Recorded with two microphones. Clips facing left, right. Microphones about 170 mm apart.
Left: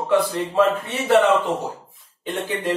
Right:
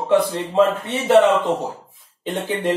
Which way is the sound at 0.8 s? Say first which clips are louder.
Right 2 dB; 20° right (ahead or behind).